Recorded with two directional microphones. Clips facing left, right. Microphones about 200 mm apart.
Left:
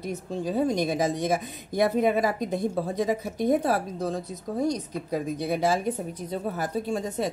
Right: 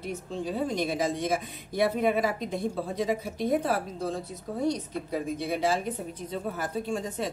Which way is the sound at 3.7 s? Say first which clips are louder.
Left 3 dB; 40° left (ahead or behind).